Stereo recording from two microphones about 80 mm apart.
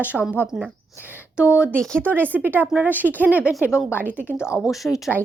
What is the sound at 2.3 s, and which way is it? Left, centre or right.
A woman's voice, right.